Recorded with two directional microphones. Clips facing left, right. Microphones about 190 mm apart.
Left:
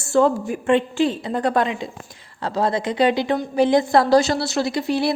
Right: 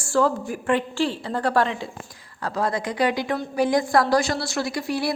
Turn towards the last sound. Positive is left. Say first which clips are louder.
# left 4 dB
turn(degrees=25)  # may be behind; listen again after turning